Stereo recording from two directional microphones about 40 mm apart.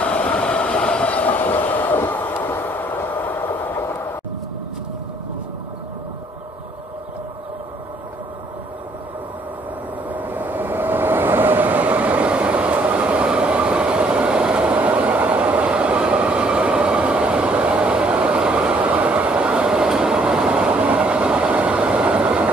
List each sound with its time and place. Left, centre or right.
0.0 s train: left
2.0 s vehicle: left
3.2 s train: left
10.0 s vehicle: right
18.8 s train: right